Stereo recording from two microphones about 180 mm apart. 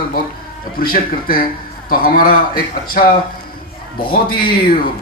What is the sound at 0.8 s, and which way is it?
A man's voice, 55° left (ahead or behind).